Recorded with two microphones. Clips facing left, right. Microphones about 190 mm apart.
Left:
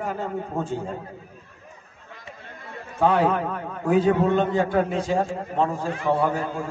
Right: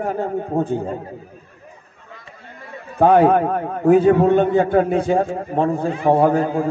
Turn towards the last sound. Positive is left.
turn(degrees=-55)  # may be behind; listen again after turning